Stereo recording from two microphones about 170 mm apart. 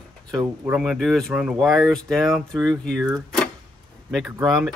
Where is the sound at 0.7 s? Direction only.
Centre (ahead or behind).